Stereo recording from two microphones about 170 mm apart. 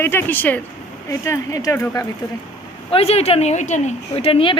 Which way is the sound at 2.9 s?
35° left (ahead or behind).